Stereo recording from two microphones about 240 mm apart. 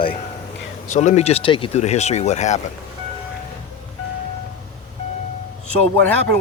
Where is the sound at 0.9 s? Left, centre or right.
Left.